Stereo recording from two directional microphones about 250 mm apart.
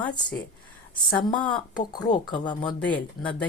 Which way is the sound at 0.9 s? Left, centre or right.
Centre.